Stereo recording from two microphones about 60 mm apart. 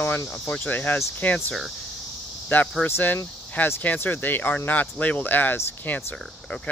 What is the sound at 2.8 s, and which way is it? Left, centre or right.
Speech, left.